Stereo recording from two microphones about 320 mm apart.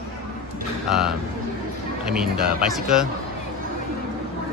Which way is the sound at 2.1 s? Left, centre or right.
Centre.